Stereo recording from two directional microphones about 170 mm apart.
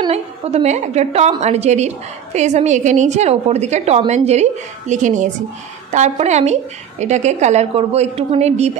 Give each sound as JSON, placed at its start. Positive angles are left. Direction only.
{"t": 0.1, "sound": "a woman's voice", "side_deg": -40}